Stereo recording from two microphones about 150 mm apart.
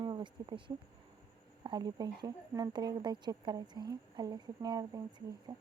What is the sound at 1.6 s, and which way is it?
A woman's voice, 25° right (ahead or behind).